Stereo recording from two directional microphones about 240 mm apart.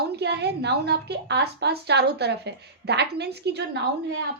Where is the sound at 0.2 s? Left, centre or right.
Right.